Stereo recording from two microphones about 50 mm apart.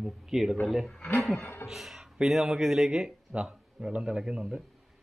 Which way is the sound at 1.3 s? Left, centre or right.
Left.